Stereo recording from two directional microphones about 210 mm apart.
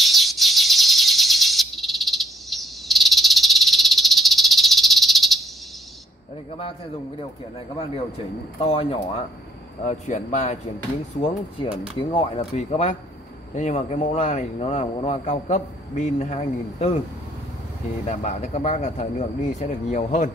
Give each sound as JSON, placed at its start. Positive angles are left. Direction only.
{"t": 0.0, "sound": "bird", "side_deg": 0}
{"t": 8.5, "sound": "a man's voice", "side_deg": 25}
{"t": 11.7, "sound": "speech", "side_deg": -5}
{"t": 12.0, "sound": "a man's voice", "side_deg": 25}
{"t": 18.0, "sound": "a man's voice", "side_deg": 35}